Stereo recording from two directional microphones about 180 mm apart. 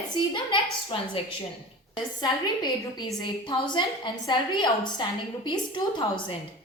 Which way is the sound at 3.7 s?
25° left (ahead or behind).